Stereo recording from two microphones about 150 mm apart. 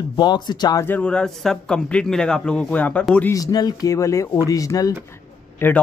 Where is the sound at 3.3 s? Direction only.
25° left (ahead or behind).